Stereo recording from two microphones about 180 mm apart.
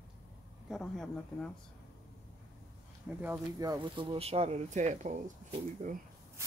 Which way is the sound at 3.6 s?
25° right (ahead or behind).